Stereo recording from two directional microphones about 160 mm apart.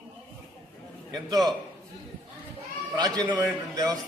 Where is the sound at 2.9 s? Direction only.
25° right (ahead or behind).